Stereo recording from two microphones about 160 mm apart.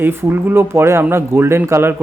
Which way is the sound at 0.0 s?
15° right (ahead or behind).